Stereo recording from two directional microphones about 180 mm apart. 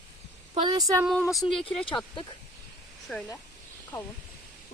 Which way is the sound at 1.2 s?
20° left (ahead or behind).